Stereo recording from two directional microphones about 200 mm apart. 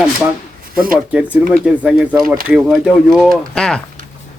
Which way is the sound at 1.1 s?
5° right (ahead or behind).